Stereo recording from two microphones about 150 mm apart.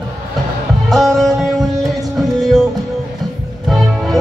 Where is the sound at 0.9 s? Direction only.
Centre (ahead or behind).